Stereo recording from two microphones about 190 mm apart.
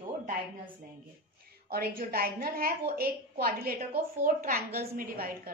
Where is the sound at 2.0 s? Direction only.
50° right (ahead or behind).